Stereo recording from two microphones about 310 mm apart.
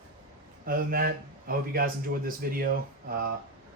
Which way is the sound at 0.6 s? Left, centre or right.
Right.